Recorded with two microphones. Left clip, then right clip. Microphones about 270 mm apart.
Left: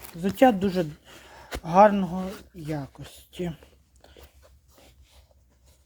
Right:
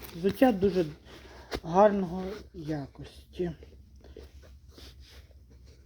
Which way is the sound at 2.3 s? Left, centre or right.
Left.